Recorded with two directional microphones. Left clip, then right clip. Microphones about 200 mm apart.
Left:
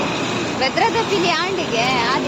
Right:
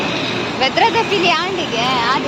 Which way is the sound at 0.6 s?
5° right (ahead or behind).